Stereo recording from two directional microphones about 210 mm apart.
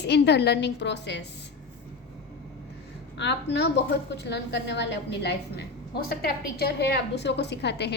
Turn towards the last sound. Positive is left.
turn(degrees=55)  # may be behind; listen again after turning